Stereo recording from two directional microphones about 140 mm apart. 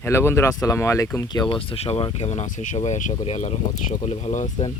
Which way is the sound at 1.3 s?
30° left (ahead or behind).